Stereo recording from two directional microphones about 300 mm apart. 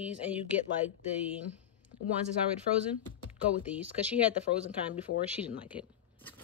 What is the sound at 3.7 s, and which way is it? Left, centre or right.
Speech, centre.